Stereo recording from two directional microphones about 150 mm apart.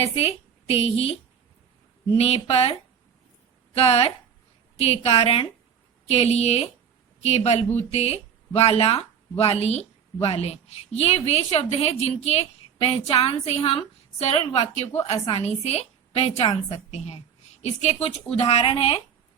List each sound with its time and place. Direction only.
0.0 s a woman's voice: 40° left (ahead or behind)
2.1 s speech: 40° left (ahead or behind)
3.8 s a woman's voice: 40° left (ahead or behind)